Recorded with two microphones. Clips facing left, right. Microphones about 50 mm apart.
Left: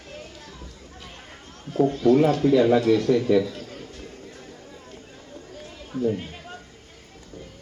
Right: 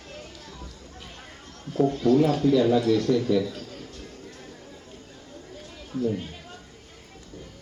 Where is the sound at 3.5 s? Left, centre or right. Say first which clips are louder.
Left 1 dB; left.